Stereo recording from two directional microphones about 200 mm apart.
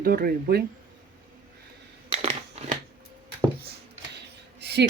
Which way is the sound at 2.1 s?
30° right (ahead or behind).